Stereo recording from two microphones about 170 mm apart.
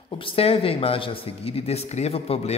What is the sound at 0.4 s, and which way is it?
Speech, 35° left (ahead or behind).